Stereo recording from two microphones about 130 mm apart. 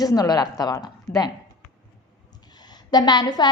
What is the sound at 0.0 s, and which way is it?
A woman's voice, 30° left (ahead or behind).